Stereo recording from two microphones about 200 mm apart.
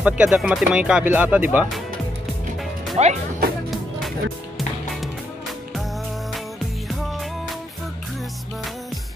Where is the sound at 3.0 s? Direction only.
35° right (ahead or behind).